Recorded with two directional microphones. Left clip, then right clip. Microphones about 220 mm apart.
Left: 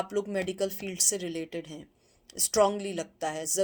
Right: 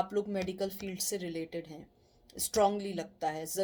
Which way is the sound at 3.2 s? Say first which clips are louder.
Left 4 dB; 35° left (ahead or behind).